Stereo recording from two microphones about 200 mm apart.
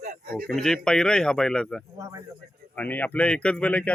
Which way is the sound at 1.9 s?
15° right (ahead or behind).